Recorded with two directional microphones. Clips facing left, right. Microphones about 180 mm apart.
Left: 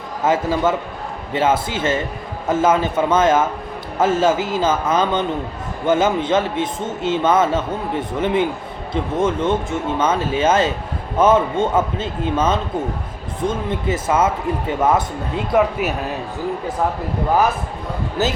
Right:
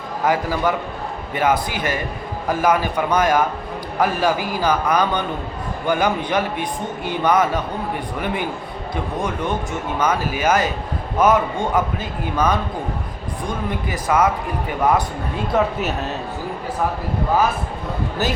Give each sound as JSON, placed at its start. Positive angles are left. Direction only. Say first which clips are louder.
{"t": 0.3, "sound": "a man's voice", "louder": "left 2 dB", "side_deg": 25}
{"t": 15.5, "sound": "speech", "louder": "left 3 dB", "side_deg": 10}